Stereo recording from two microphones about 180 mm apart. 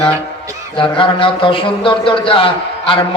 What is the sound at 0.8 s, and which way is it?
A man's voice, 30° left (ahead or behind).